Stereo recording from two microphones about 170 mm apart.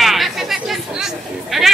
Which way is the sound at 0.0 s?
Centre (ahead or behind).